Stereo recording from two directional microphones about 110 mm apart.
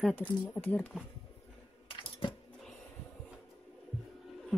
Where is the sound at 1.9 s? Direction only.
50° left (ahead or behind).